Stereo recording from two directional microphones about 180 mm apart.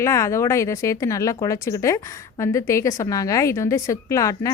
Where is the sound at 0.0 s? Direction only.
15° left (ahead or behind).